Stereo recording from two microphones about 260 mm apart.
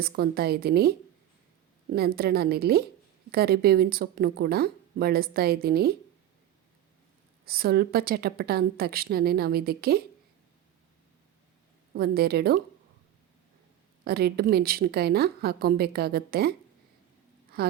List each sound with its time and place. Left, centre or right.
0.0 s a woman's voice: right
7.4 s a woman's voice: right
11.9 s a woman's voice: right
14.0 s a woman's voice: right